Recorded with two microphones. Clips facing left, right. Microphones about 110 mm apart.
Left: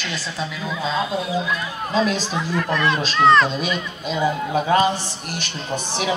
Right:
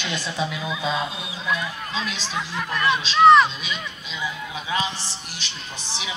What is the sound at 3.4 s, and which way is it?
A man's voice, 45° left (ahead or behind).